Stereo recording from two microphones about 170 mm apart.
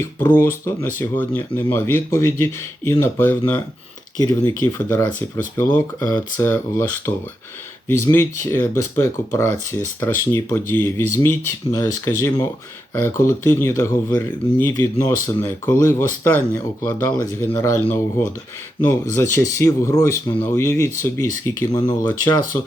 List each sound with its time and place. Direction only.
0.0 s a man's voice: 15° left (ahead or behind)